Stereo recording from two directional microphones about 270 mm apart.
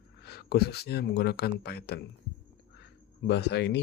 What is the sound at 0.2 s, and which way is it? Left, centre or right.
Speech, left.